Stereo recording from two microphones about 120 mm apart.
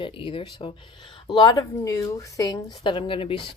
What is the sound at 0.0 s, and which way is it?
Speech, 45° left (ahead or behind).